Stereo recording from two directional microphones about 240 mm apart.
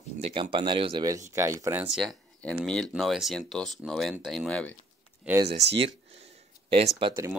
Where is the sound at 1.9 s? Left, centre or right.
Centre.